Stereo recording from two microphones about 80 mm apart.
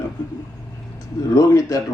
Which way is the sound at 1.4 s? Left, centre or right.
Left.